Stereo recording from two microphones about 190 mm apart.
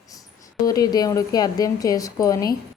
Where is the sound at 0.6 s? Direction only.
20° left (ahead or behind).